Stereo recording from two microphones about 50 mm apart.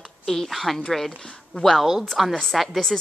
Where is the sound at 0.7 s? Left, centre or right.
Centre.